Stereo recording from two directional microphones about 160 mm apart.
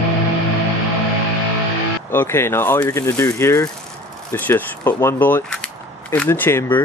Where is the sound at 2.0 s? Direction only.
15° left (ahead or behind).